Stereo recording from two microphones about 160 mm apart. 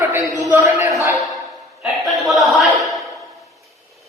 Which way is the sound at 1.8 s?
Centre (ahead or behind).